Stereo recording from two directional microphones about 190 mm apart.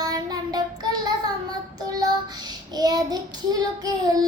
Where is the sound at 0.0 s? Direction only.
20° right (ahead or behind).